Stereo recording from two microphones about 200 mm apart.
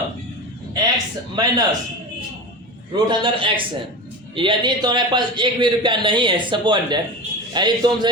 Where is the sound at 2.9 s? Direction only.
25° right (ahead or behind).